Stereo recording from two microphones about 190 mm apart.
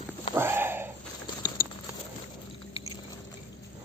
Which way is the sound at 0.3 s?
10° right (ahead or behind).